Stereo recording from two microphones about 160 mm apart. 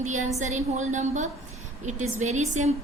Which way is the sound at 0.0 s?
50° right (ahead or behind).